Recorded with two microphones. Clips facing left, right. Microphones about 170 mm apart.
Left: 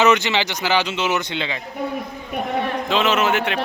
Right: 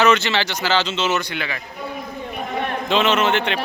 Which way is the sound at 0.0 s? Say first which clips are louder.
Even; 15° left (ahead or behind).